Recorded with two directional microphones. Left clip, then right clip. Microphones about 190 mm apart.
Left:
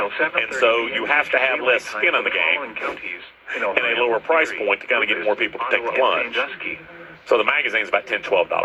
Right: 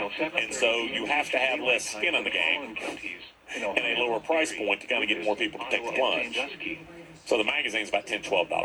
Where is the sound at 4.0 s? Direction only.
40° left (ahead or behind).